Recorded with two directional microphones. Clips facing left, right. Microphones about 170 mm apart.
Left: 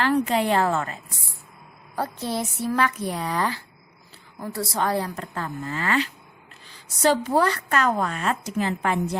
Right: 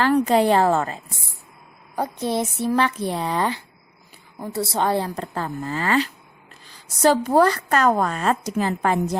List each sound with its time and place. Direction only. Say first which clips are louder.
0.0 s a woman's voice: right 4 dB; 40° right (ahead or behind)
2.0 s a woman's voice: right 4 dB; 20° right (ahead or behind)
7.3 s a woman's voice: right 4 dB; 40° right (ahead or behind)